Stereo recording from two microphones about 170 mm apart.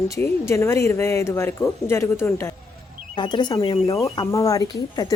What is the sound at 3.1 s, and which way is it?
Speech, 25° left (ahead or behind).